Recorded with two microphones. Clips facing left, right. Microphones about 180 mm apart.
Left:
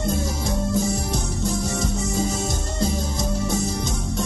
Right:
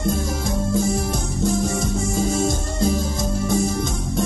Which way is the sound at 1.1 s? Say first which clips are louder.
Right 3 dB; 50° right (ahead or behind).